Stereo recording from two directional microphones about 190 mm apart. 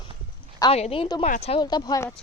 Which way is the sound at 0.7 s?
30° left (ahead or behind).